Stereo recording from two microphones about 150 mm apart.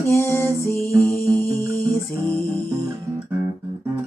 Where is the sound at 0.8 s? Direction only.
20° right (ahead or behind).